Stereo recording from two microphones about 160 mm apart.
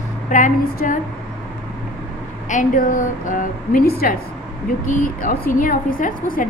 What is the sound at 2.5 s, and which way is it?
A woman's voice, 55° left (ahead or behind).